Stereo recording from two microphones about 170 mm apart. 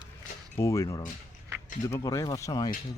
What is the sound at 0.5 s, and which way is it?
Speech, 15° left (ahead or behind).